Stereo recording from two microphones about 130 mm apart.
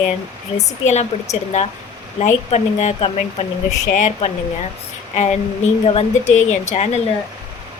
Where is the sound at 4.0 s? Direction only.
65° left (ahead or behind).